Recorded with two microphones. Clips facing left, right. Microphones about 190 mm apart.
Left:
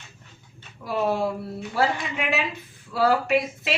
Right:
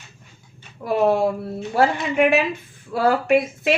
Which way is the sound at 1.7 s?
50° right (ahead or behind).